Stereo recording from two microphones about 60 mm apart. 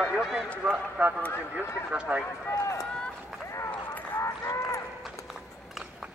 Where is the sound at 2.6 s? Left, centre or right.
Left.